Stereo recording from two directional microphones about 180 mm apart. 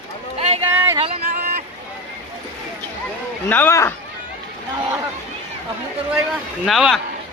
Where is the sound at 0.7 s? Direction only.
10° right (ahead or behind).